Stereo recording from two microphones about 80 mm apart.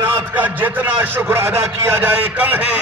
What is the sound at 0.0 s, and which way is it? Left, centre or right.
A man's voice, right.